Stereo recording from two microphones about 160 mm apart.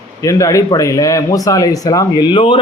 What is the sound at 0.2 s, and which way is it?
Speech, 20° left (ahead or behind).